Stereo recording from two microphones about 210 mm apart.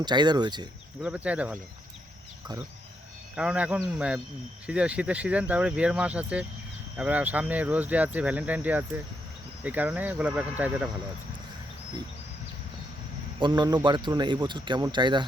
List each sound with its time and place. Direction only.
0.0 s a man's voice: 20° right (ahead or behind)
1.0 s speech: 5° right (ahead or behind)
3.3 s speech: 5° right (ahead or behind)
13.4 s a man's voice: 20° right (ahead or behind)